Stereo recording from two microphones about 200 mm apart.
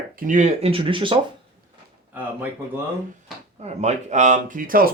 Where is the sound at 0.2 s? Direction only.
40° right (ahead or behind).